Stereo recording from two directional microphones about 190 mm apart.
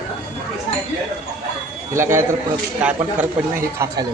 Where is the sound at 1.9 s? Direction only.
15° right (ahead or behind).